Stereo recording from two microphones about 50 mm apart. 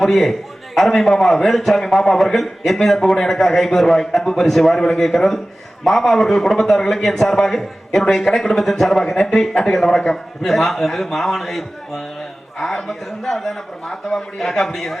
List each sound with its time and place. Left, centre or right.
0.0 s a man's voice: centre